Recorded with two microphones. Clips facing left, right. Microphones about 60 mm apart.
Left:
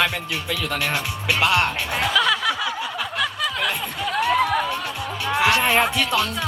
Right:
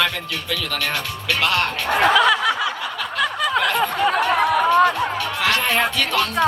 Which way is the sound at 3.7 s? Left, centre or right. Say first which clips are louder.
Right 6 dB; right.